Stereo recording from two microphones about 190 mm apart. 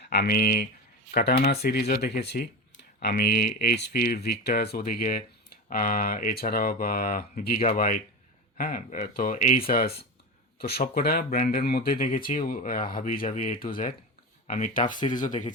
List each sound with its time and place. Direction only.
0.0 s speech: 60° left (ahead or behind); by 15.3 s 45° left (ahead or behind)